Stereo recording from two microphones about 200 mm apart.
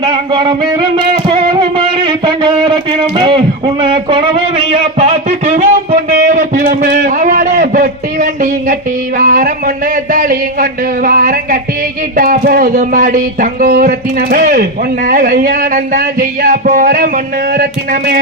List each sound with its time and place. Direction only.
0.0 s music: 20° right (ahead or behind)
6.7 s a sound: 45° right (ahead or behind)
9.1 s speech: 40° right (ahead or behind)